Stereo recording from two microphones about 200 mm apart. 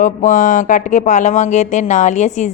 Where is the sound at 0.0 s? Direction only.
40° left (ahead or behind).